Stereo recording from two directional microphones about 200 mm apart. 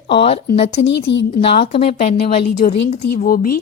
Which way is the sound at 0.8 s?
60° left (ahead or behind).